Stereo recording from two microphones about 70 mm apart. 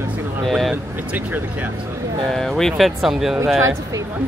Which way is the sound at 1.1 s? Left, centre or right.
Right.